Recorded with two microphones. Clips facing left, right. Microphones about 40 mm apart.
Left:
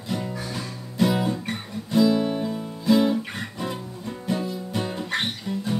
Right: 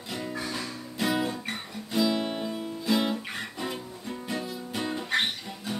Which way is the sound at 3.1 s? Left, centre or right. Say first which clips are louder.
Left 5 dB; centre.